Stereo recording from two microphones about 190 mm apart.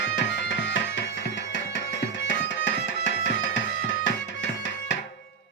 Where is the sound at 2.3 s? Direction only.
70° left (ahead or behind).